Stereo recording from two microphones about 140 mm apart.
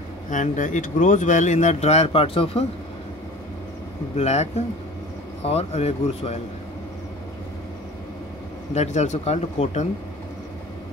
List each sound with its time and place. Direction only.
0.3 s speech: 65° left (ahead or behind); by 2.6 s 45° left (ahead or behind)
4.2 s speech: 50° left (ahead or behind)
8.7 s speech: 55° left (ahead or behind)